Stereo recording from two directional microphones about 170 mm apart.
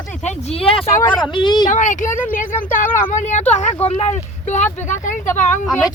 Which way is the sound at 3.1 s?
45° left (ahead or behind).